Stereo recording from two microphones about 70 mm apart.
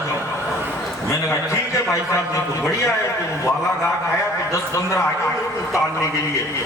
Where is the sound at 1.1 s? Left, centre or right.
Left.